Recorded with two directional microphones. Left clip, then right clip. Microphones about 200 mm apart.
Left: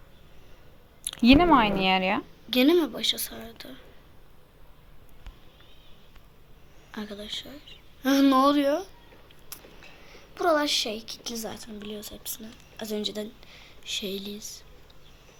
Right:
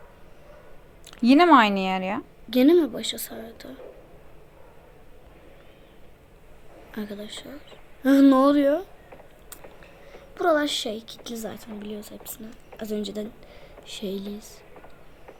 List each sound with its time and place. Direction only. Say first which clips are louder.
1.0 s a sound: left 1 dB; centre (ahead or behind)
1.4 s a woman's voice: right 4 dB; 10° right (ahead or behind)
2.5 s a woman's voice: right 3 dB; 45° right (ahead or behind)
6.9 s a woman's voice: even; 45° right (ahead or behind)
10.1 s a woman's voice: right 2 dB; 50° right (ahead or behind)